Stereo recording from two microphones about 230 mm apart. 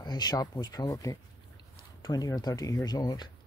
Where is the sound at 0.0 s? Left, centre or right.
Centre.